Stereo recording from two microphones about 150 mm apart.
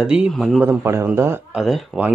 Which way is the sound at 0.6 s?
15° right (ahead or behind).